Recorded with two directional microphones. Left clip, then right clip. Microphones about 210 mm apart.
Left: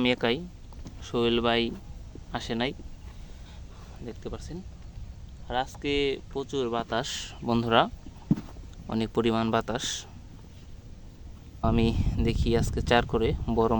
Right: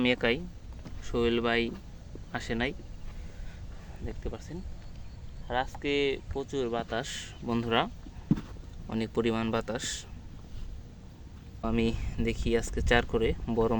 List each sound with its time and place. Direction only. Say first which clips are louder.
0.0 s speech: left 1 dB; 20° left (ahead or behind)
4.0 s speech: left 2 dB; 25° left (ahead or behind)
11.6 s speech: left 4 dB; 25° left (ahead or behind)